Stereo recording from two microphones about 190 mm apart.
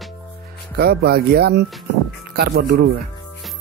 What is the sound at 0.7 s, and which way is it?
Speech, 55° right (ahead or behind).